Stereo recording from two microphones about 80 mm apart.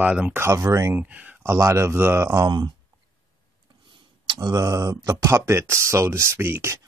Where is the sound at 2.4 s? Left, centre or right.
Right.